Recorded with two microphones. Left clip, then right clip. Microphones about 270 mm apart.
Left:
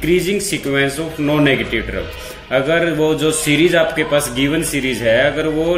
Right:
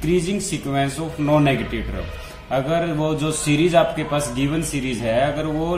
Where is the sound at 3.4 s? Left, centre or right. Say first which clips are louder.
Left 2 dB; right.